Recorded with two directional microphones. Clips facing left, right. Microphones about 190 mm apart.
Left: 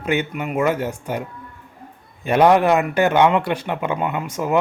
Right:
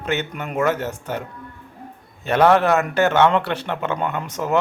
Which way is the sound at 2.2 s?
15° left (ahead or behind).